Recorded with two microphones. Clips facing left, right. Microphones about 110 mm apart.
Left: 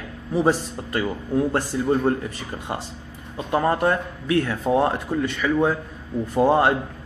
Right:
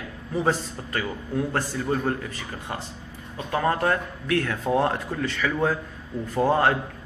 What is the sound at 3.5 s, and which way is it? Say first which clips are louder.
A man's voice: left 3 dB; 20° left (ahead or behind).